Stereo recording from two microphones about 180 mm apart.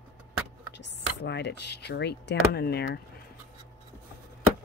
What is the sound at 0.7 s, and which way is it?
Speech, 70° left (ahead or behind).